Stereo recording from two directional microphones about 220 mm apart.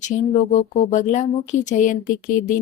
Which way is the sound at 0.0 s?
35° left (ahead or behind).